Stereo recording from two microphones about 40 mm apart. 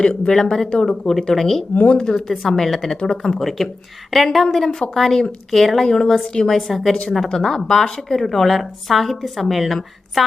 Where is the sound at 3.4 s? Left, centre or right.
Centre.